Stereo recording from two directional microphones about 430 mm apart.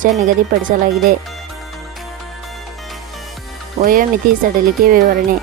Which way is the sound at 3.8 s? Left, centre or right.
Centre.